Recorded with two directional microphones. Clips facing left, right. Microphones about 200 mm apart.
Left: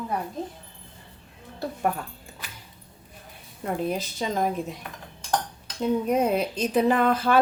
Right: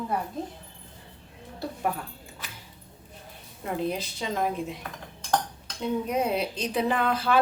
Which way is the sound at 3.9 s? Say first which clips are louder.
Left 2 dB; 45° left (ahead or behind).